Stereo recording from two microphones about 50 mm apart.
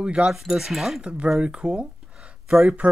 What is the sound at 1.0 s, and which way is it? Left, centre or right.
Speech, right.